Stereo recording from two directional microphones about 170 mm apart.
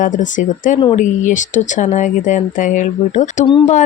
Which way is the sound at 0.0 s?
50° left (ahead or behind).